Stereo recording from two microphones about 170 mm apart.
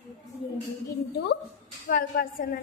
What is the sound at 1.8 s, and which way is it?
Speech, 60° left (ahead or behind).